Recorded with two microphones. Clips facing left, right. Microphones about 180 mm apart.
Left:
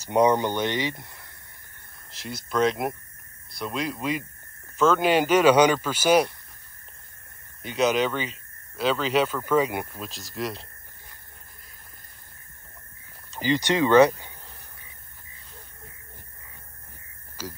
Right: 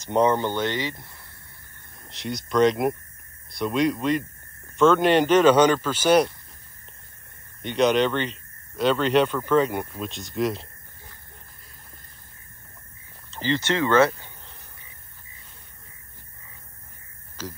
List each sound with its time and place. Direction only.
0.0 s speech: 10° left (ahead or behind)
2.0 s speech: centre (ahead or behind)
7.6 s speech: 5° left (ahead or behind)
13.3 s speech: 15° left (ahead or behind)
17.4 s speech: 10° left (ahead or behind)